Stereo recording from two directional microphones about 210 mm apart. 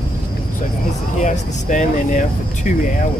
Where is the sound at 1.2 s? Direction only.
35° left (ahead or behind).